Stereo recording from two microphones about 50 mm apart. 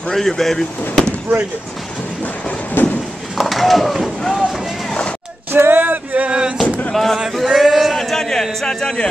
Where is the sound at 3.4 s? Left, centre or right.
Centre.